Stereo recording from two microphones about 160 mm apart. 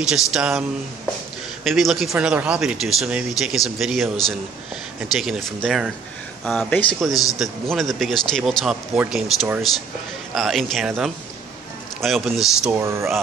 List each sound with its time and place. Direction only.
0.1 s speech: 5° right (ahead or behind)
12.7 s speech: 15° right (ahead or behind)